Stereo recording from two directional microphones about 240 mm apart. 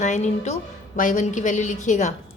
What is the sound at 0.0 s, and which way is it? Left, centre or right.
A woman's voice, left.